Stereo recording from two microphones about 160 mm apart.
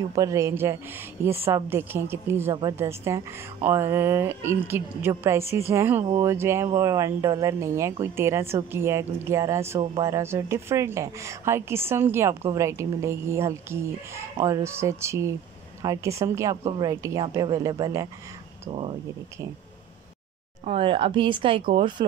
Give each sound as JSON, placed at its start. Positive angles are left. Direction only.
{"t": 0.1, "sound": "a woman's voice", "side_deg": -20}
{"t": 18.7, "sound": "speech", "side_deg": -35}
{"t": 20.6, "sound": "speech", "side_deg": -35}